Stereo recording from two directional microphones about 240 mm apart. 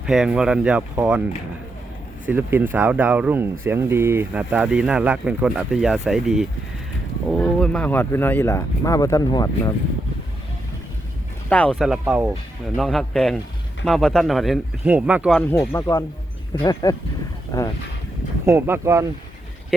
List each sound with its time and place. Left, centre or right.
0.0 s speech: centre
2.2 s speech: centre
11.4 s speech: centre
15.4 s speech: centre
18.4 s speech: centre